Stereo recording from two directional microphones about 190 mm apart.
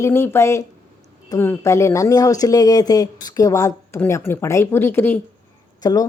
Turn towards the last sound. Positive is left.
turn(degrees=20)  # may be behind; listen again after turning